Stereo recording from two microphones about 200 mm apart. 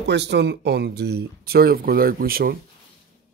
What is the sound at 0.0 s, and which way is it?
Speech, 60° right (ahead or behind).